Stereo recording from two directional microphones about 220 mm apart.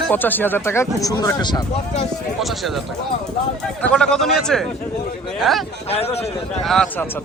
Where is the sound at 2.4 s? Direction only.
Centre (ahead or behind).